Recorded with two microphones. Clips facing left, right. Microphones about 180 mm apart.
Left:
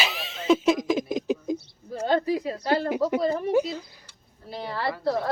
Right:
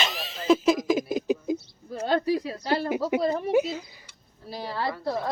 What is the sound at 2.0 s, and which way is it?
Speech, 50° left (ahead or behind).